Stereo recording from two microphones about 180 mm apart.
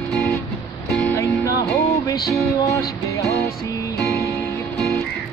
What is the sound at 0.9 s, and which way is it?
Music, 10° left (ahead or behind).